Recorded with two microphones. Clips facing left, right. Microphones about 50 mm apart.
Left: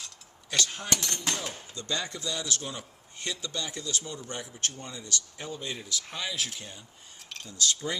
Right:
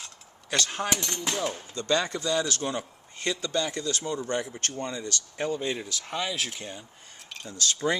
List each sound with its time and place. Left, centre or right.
0.6 s speech: right
0.9 s speech: centre
1.7 s speech: right
5.7 s speech: right